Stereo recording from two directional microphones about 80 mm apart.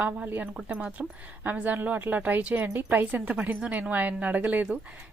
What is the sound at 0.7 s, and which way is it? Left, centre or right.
Speech, centre.